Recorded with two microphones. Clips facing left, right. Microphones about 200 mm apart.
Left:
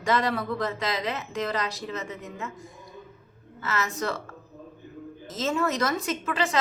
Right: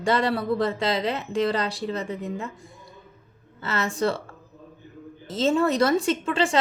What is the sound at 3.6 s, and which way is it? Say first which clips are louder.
A woman's voice: right 4 dB; 30° right (ahead or behind).